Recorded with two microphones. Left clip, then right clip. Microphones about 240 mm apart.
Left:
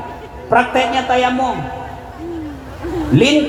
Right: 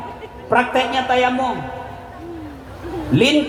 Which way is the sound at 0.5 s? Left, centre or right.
Right.